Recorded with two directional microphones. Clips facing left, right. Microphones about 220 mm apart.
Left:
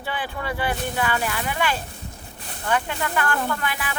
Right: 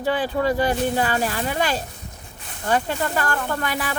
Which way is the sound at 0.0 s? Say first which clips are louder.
Right 9 dB; 40° right (ahead or behind).